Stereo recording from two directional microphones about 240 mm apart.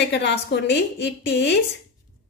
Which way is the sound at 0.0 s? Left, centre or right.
Left.